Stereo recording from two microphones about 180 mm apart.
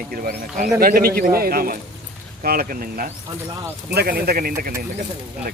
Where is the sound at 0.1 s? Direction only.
55° right (ahead or behind).